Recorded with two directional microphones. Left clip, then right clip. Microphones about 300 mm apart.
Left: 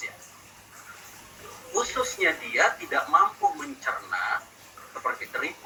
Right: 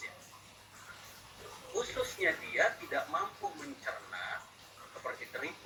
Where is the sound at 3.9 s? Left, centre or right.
Left.